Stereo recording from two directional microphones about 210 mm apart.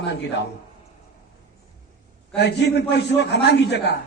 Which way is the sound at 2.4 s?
55° left (ahead or behind).